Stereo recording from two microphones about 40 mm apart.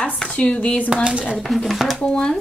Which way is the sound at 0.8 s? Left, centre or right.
Right.